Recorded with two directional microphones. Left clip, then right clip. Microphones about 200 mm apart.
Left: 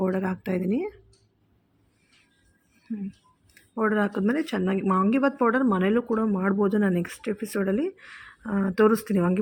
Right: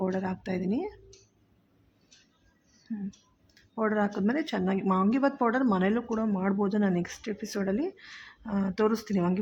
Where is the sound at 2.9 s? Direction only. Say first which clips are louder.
Left 3 dB; 10° left (ahead or behind).